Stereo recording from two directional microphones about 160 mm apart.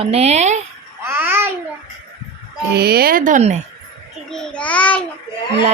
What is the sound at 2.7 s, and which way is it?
Speech, 85° right.